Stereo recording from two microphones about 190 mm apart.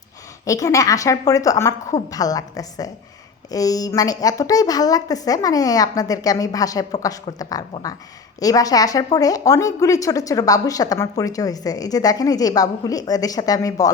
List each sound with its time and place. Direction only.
0.4 s a woman's voice: 15° left (ahead or behind)